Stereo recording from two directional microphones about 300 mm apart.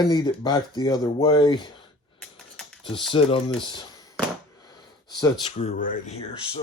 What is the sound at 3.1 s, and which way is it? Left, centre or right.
Speech, centre.